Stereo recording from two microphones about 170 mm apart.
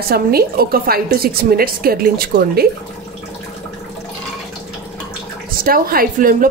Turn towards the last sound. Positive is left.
turn(degrees=-55)  # may be behind; listen again after turning